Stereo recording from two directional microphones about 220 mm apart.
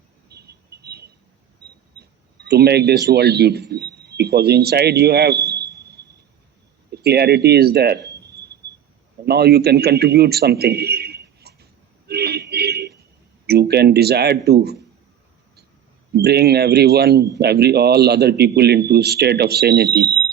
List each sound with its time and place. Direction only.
0.3 s a sound: 45° right (ahead or behind)
2.0 s speech: 45° right (ahead or behind)
6.9 s speech: 45° right (ahead or behind)
9.2 s a sound: 45° right (ahead or behind)
13.5 s speech: 45° right (ahead or behind)
16.1 s speech: 45° right (ahead or behind)